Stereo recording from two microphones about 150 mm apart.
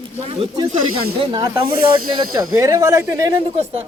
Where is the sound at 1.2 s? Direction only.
30° right (ahead or behind).